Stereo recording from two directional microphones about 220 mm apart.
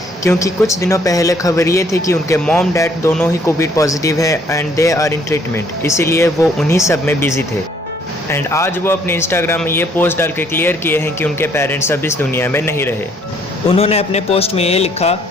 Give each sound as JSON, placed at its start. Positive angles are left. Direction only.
{"t": 0.3, "sound": "speech", "side_deg": 15}
{"t": 13.7, "sound": "a man's voice", "side_deg": 25}